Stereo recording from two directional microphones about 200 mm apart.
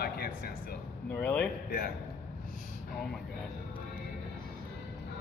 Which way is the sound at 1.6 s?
50° left (ahead or behind).